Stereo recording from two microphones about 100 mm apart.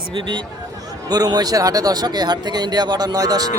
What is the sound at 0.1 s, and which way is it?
Speech, 50° right (ahead or behind).